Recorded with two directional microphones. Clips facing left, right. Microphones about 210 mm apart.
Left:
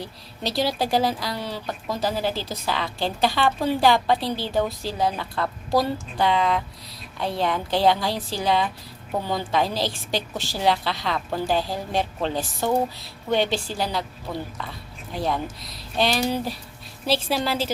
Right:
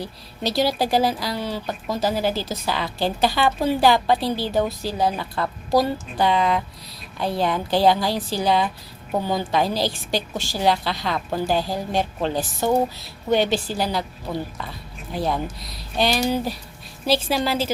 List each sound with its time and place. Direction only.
0.0 s speech: centre (ahead or behind)
15.1 s speech: 5° right (ahead or behind)